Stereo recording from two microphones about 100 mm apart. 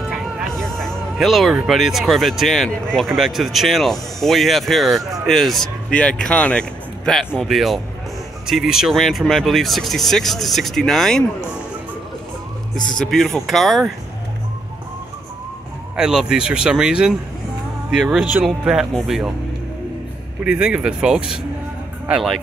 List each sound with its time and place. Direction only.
0.6 s speech: 5° left (ahead or behind)
7.3 s speech: centre (ahead or behind)
12.7 s a man's voice: 45° left (ahead or behind)
13.0 s speech: 5° left (ahead or behind)
16.0 s speech: 5° right (ahead or behind)
20.4 s speech: 10° right (ahead or behind)